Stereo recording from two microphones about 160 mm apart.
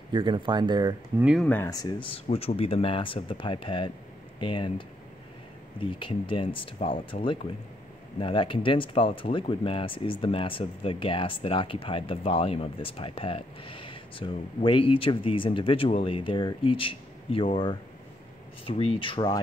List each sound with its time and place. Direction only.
0.1 s speech: 30° right (ahead or behind)
1.4 s speech: 10° left (ahead or behind)
1.7 s speech: 25° left (ahead or behind)
5.9 s speech: 30° left (ahead or behind)